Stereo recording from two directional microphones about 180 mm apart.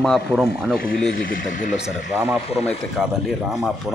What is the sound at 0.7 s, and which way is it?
Speech, 55° left (ahead or behind).